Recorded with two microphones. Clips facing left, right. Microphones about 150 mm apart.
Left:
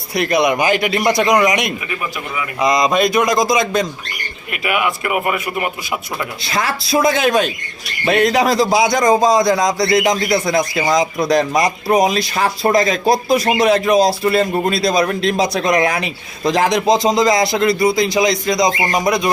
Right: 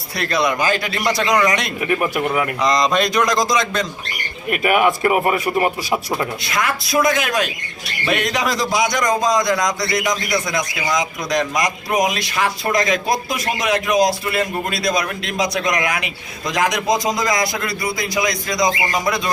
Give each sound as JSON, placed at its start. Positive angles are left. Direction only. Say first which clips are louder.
{"t": 0.2, "sound": "a man's voice", "louder": "left 4 dB", "side_deg": 15}
{"t": 1.9, "sound": "speech", "louder": "right 6 dB", "side_deg": -55}
{"t": 2.6, "sound": "a man's voice", "louder": "left 5 dB", "side_deg": 10}
{"t": 4.5, "sound": "a man's voice", "louder": "right 3 dB", "side_deg": -45}
{"t": 6.4, "sound": "a man's voice", "louder": "left 1 dB", "side_deg": 30}
{"t": 18.7, "sound": "speech", "louder": "left 3 dB", "side_deg": 35}
{"t": 18.9, "sound": "a man's voice", "louder": "left 4 dB", "side_deg": 20}